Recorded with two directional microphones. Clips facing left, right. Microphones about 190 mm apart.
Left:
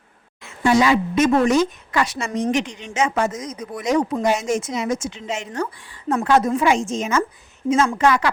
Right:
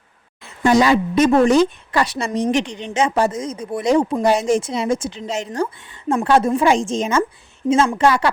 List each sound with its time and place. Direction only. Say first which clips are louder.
0.6 s a woman's voice: right 2 dB; 35° right (ahead or behind)